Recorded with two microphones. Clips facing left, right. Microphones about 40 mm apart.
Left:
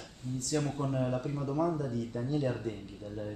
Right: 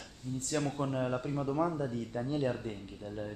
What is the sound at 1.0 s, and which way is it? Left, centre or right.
Speech, centre.